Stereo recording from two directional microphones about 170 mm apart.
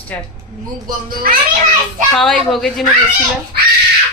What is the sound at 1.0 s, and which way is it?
Speech, 55° right (ahead or behind).